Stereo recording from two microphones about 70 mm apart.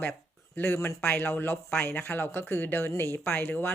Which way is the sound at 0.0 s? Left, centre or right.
Left.